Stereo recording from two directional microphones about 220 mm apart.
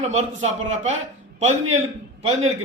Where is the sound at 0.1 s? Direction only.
30° right (ahead or behind).